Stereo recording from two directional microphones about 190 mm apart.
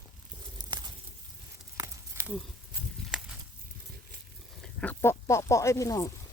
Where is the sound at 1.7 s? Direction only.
15° right (ahead or behind).